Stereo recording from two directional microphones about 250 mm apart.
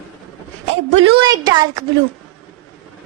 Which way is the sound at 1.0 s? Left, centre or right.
Centre.